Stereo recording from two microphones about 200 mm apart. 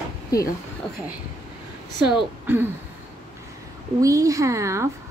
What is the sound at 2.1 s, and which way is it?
Speech, 5° right (ahead or behind).